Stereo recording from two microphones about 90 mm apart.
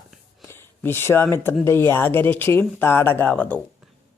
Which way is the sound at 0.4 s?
25° left (ahead or behind).